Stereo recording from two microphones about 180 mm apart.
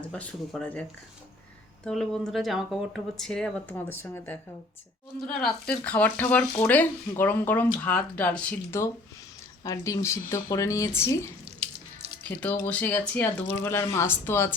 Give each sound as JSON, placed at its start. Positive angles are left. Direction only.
{"t": 0.0, "sound": "speech", "side_deg": 10}
{"t": 12.3, "sound": "speech", "side_deg": 10}